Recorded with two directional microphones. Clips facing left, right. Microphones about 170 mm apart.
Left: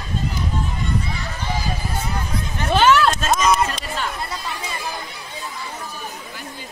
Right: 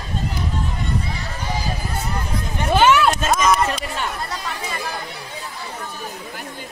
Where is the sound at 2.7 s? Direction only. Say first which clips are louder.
Even; 5° right (ahead or behind).